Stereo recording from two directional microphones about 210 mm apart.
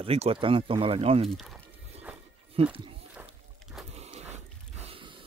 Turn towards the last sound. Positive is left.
turn(degrees=-25)  # may be behind; listen again after turning